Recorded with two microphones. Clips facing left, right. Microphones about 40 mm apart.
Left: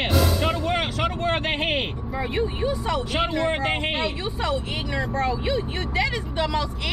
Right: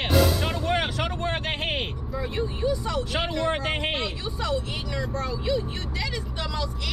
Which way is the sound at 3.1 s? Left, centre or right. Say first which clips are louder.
Left 2 dB; centre.